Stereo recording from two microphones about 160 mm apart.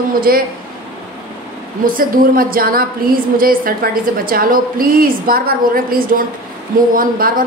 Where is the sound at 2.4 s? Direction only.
65° right (ahead or behind).